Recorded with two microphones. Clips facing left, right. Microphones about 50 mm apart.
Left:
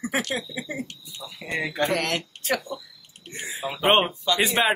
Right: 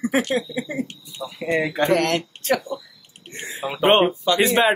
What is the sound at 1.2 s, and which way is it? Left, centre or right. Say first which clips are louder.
Speech: right 7 dB; right.